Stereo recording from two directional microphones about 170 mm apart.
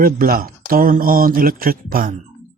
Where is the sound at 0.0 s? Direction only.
60° right (ahead or behind).